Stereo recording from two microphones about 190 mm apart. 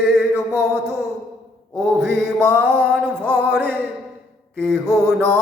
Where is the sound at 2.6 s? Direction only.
5° left (ahead or behind).